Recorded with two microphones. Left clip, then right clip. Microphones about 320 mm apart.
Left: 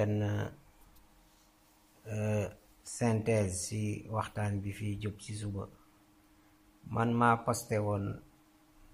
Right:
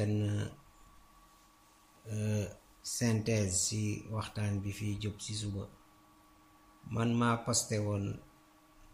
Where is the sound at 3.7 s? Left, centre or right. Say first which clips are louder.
Right 1 dB; left.